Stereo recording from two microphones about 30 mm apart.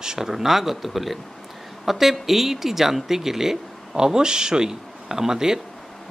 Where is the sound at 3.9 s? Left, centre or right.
Right.